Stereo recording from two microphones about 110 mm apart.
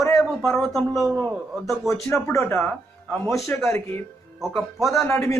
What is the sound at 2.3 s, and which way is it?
Speech, 30° left (ahead or behind).